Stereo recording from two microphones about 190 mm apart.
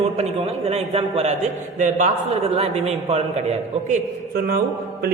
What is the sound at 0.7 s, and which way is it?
A man's voice, 35° right (ahead or behind).